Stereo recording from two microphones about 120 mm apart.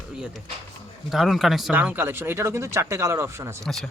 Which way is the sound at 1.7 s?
15° right (ahead or behind).